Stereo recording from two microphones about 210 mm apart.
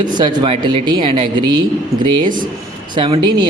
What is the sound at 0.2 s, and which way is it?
Speech, 20° right (ahead or behind).